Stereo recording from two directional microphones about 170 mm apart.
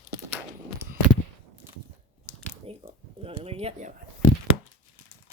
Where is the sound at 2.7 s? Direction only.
35° right (ahead or behind).